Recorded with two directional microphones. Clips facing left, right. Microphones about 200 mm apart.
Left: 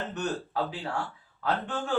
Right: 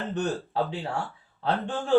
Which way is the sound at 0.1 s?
25° right (ahead or behind).